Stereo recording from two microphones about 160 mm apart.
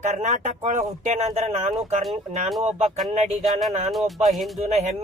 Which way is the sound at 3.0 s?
45° right (ahead or behind).